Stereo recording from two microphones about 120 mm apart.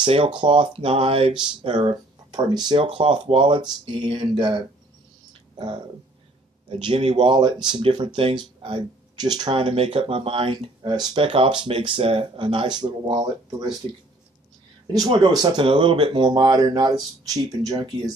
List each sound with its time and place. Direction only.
0.0 s speech: 45° right (ahead or behind)
2.8 s speech: 50° right (ahead or behind)
6.8 s speech: 45° right (ahead or behind)
15.1 s speech: 35° right (ahead or behind)